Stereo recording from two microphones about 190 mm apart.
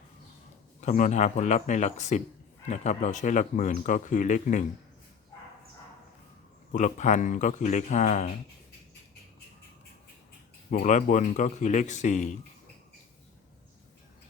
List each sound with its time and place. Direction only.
0.8 s speech: 40° left (ahead or behind)
6.7 s speech: 40° left (ahead or behind)
10.7 s speech: 45° left (ahead or behind)